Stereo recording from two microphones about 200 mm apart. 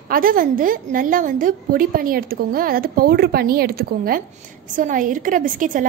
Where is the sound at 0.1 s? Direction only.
45° right (ahead or behind).